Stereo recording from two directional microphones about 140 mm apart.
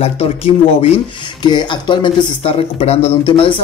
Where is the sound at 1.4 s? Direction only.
30° left (ahead or behind).